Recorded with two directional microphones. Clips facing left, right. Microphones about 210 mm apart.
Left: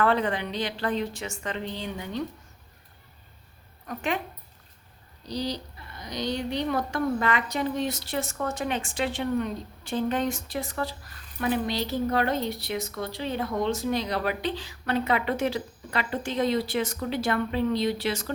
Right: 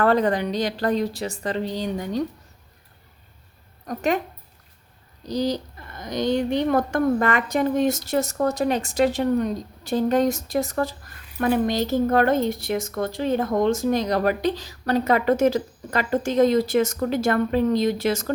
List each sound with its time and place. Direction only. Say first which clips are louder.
0.0 s a woman's voice: right 5 dB; 40° right (ahead or behind)
3.8 s a woman's voice: right 6 dB; 40° right (ahead or behind)
5.2 s speech: right 7 dB; 45° right (ahead or behind)